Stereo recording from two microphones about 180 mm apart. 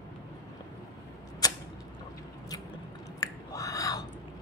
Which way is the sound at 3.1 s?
20° left (ahead or behind).